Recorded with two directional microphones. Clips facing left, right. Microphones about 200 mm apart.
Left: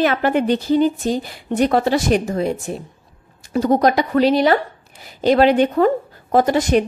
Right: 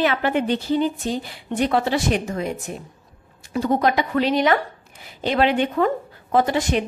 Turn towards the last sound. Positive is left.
turn(degrees=40)  # may be behind; listen again after turning